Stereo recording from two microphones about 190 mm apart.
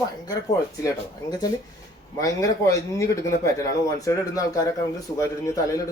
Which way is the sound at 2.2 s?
15° left (ahead or behind).